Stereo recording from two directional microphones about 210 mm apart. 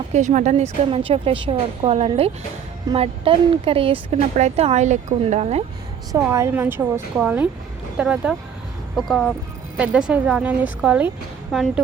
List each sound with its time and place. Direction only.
0.1 s speech: 35° right (ahead or behind)
6.1 s a woman's voice: 15° right (ahead or behind)